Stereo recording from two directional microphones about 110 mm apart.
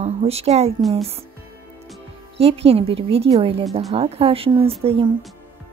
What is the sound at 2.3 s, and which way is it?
A woman's voice, 65° right (ahead or behind).